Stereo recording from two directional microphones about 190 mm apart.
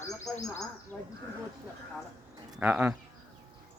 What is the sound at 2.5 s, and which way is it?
Speech, 5° right (ahead or behind).